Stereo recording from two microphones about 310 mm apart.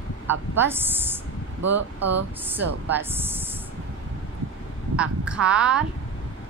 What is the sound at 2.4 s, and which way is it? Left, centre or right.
Speech, centre.